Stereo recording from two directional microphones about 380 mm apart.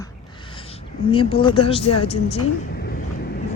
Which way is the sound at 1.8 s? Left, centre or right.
Left.